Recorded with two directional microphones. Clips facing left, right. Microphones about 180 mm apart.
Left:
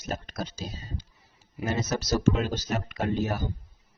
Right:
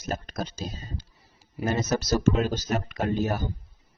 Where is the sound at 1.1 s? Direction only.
35° right (ahead or behind).